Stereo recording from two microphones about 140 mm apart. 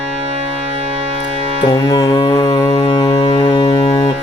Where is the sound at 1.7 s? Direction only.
25° left (ahead or behind).